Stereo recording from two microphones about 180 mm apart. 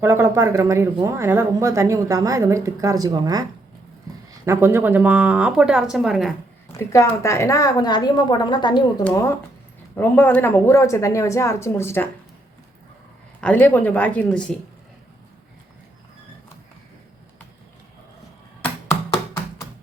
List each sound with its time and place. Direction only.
0.0 s speech: 15° right (ahead or behind)
6.7 s a woman's voice: 15° left (ahead or behind)
9.9 s a woman's voice: 10° left (ahead or behind)
13.4 s a woman's voice: 10° left (ahead or behind)